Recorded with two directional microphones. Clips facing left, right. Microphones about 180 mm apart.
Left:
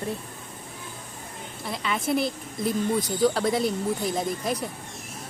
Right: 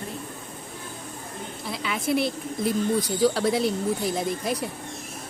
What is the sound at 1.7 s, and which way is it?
A woman's voice, centre (ahead or behind).